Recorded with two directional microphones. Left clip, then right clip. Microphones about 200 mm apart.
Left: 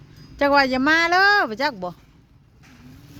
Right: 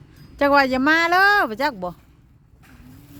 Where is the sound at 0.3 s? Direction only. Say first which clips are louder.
Right 1 dB; 15° right (ahead or behind).